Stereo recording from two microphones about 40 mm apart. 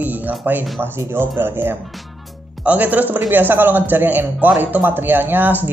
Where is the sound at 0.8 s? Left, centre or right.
Right.